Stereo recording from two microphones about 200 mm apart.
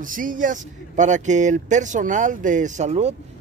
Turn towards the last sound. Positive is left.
turn(degrees=-35)  # may be behind; listen again after turning